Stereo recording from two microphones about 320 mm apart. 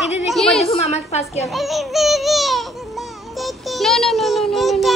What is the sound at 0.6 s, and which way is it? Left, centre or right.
Speech, centre.